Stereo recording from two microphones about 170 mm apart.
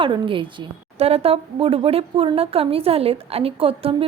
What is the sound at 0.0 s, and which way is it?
A woman's voice, 30° right (ahead or behind).